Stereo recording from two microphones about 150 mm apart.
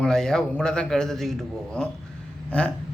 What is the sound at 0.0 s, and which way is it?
A man's voice, 5° left (ahead or behind).